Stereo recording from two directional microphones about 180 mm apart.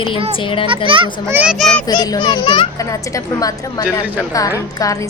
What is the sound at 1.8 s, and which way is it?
A woman's voice, 20° left (ahead or behind).